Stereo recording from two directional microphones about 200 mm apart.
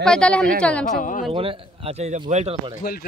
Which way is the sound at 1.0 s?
40° left (ahead or behind).